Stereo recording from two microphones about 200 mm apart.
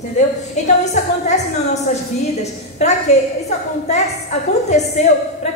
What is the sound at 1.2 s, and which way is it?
Speech, 35° left (ahead or behind).